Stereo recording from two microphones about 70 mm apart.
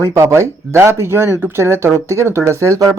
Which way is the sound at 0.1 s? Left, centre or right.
Right.